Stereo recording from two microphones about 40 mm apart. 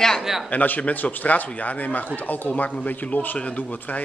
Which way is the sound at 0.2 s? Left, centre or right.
Centre.